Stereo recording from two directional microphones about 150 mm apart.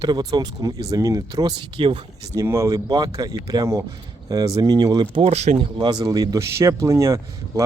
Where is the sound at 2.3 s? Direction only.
20° right (ahead or behind).